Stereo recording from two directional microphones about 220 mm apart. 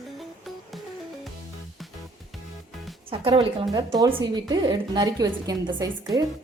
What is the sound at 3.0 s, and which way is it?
Music, 25° right (ahead or behind).